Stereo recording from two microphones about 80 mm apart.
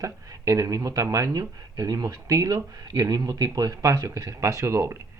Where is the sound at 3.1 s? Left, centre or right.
Right.